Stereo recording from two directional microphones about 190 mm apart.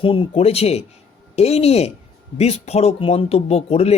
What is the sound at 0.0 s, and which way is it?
Speech, 30° left (ahead or behind).